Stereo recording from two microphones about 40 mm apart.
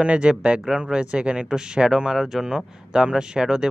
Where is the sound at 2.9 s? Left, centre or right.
Right.